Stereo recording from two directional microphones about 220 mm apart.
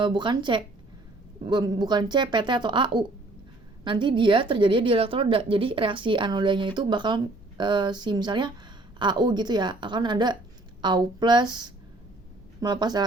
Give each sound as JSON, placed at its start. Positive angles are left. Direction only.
{"t": 0.0, "sound": "a woman's voice", "side_deg": -20}
{"t": 12.5, "sound": "a woman's voice", "side_deg": -20}